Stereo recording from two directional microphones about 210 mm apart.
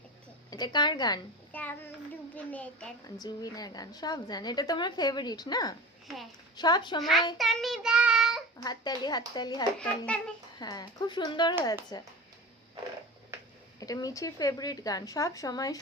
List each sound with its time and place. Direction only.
0.5 s a woman's voice: 20° left (ahead or behind)
1.5 s speech: 10° left (ahead or behind)
3.2 s a woman's voice: 20° left (ahead or behind)
7.0 s a child's voice: centre (ahead or behind)
7.3 s child singing: centre (ahead or behind)
8.6 s a woman's voice: 20° left (ahead or behind)
10.1 s a child's voice: 5° left (ahead or behind)
10.6 s a woman's voice: 20° left (ahead or behind)
13.7 s speech: 15° left (ahead or behind)